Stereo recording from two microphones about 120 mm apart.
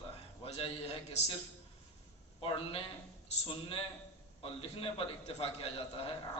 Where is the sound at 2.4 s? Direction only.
50° left (ahead or behind).